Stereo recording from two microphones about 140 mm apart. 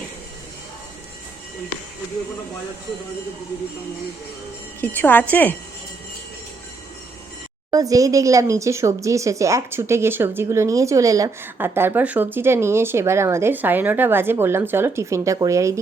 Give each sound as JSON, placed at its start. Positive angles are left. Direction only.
{"t": 4.8, "sound": "a woman's voice", "side_deg": 15}
{"t": 7.7, "sound": "speech", "side_deg": -25}